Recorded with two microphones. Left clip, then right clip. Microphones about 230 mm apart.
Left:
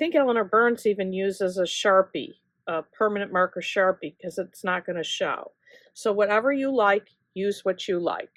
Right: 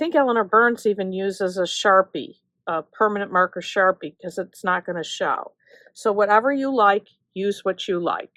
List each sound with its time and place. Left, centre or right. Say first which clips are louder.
0.0 s speech: right 3 dB; right